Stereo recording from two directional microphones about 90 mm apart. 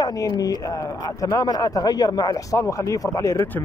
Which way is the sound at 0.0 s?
45° left (ahead or behind).